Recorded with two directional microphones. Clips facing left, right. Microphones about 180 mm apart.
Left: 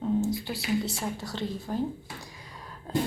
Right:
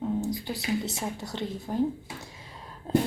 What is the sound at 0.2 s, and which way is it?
A woman's voice, 15° right (ahead or behind).